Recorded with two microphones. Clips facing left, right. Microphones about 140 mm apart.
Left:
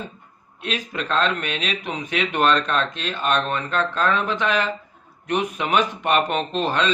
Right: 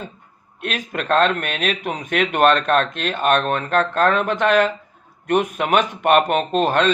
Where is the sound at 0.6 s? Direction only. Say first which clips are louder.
Right 2 dB; 55° right (ahead or behind).